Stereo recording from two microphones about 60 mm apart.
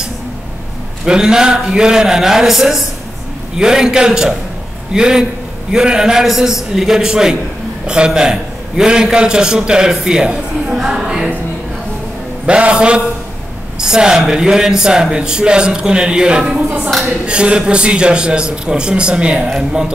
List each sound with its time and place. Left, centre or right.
1.0 s a man's voice: centre
12.4 s a man's voice: centre